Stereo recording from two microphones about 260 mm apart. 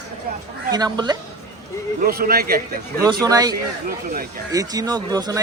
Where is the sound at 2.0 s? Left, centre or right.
Right.